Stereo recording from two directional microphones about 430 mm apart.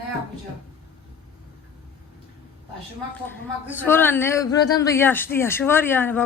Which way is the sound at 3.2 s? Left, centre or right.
Centre.